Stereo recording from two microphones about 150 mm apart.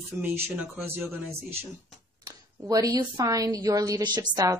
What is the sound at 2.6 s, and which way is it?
A woman's voice, 25° right (ahead or behind).